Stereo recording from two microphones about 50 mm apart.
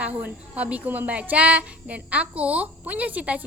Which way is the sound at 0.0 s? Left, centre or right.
Right.